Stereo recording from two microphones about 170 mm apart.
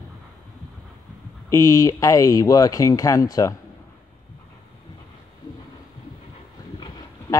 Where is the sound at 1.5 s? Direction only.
20° left (ahead or behind).